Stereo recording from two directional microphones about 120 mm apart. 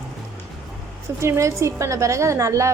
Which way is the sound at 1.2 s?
25° right (ahead or behind).